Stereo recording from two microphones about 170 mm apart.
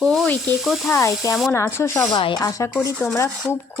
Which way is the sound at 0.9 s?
15° left (ahead or behind).